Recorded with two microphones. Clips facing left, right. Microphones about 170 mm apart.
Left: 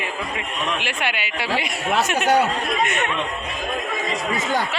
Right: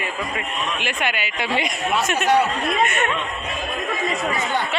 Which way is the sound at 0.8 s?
10° left (ahead or behind).